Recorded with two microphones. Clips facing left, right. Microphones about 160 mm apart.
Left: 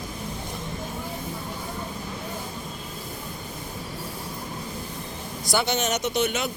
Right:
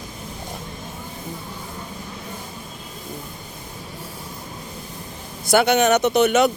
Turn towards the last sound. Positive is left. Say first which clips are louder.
# right 9 dB
turn(degrees=-65)  # may be behind; listen again after turning